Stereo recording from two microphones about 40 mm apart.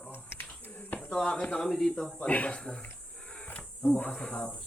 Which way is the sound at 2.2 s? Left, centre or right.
Left.